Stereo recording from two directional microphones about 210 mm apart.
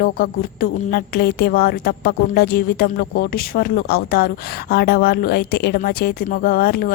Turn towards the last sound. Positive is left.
turn(degrees=45)  # may be behind; listen again after turning